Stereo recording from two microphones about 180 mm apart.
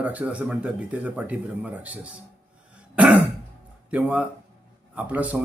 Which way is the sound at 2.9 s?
5° right (ahead or behind).